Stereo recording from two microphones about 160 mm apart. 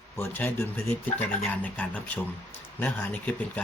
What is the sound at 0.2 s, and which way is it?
Speech, 15° left (ahead or behind).